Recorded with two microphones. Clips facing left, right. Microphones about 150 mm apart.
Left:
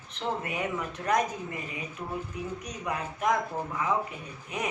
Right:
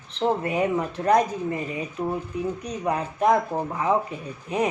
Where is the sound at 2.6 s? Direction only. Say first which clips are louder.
Right 7 dB; 35° right (ahead or behind).